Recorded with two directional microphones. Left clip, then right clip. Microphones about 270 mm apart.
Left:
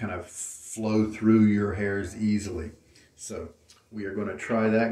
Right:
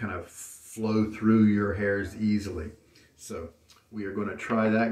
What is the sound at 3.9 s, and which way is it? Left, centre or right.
Speech, centre.